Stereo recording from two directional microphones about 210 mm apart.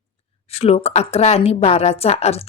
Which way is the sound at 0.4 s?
30° left (ahead or behind).